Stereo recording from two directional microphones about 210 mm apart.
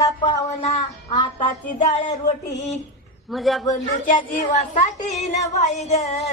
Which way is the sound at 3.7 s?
35° left (ahead or behind).